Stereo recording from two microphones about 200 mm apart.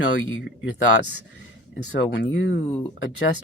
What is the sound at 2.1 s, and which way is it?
Speech, 60° left (ahead or behind).